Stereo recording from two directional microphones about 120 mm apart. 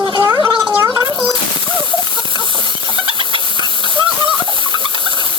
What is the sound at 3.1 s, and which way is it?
Hiss, 45° right (ahead or behind).